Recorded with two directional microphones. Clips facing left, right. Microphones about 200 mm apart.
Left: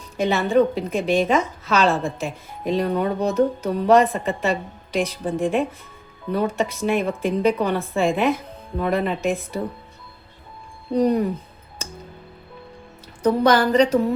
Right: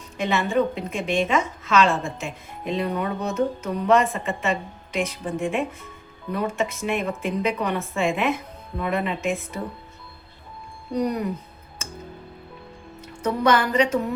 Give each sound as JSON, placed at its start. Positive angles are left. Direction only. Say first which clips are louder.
{"t": 0.2, "sound": "a woman's voice", "louder": "left 4 dB", "side_deg": 35}
{"t": 10.9, "sound": "speech", "louder": "left 6 dB", "side_deg": 30}
{"t": 13.2, "sound": "a woman's voice", "louder": "left 4 dB", "side_deg": 35}